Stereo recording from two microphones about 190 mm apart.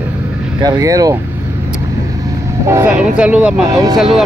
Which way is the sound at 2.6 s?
15° right (ahead or behind).